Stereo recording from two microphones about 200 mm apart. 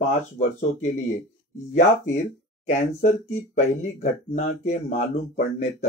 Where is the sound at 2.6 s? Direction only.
40° left (ahead or behind).